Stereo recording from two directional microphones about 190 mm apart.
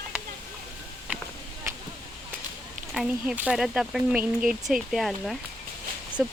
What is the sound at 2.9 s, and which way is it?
Speech, 5° right (ahead or behind).